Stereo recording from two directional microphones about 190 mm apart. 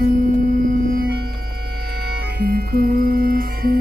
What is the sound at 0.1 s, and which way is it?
Music, 45° right (ahead or behind).